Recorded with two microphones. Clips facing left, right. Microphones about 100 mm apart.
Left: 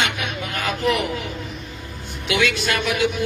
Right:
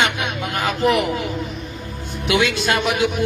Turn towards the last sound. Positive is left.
turn(degrees=-20)  # may be behind; listen again after turning